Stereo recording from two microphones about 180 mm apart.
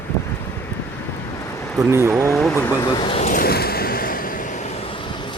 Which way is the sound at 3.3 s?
55° left (ahead or behind).